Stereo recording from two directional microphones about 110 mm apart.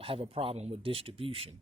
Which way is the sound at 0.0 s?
55° right (ahead or behind).